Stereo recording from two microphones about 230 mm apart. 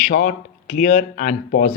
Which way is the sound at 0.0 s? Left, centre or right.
Left.